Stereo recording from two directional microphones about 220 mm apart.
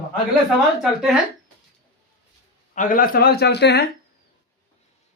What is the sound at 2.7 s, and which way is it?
A man's voice, 40° left (ahead or behind).